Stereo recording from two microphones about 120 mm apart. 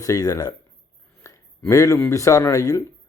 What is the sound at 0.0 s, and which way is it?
Speech, 30° left (ahead or behind).